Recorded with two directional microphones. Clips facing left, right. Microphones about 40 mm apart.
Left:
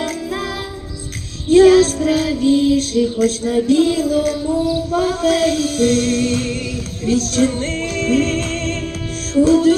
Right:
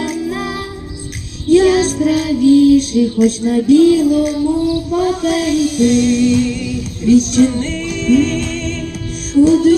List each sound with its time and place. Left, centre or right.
1.5 s music: centre